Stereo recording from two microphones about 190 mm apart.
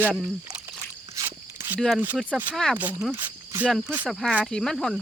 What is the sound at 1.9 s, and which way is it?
Speech, 10° right (ahead or behind).